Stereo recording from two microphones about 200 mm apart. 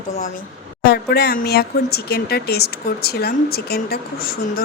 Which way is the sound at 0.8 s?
55° left (ahead or behind).